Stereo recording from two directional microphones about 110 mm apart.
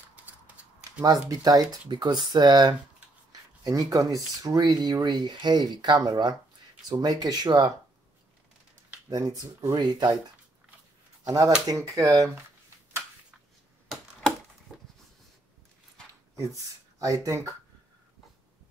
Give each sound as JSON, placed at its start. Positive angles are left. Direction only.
{"t": 0.1, "sound": "a sound", "side_deg": -10}
{"t": 1.3, "sound": "speech", "side_deg": -35}
{"t": 9.1, "sound": "speech", "side_deg": -35}
{"t": 11.2, "sound": "speech", "side_deg": -35}
{"t": 14.7, "sound": "a sound", "side_deg": -5}
{"t": 17.0, "sound": "speech", "side_deg": -30}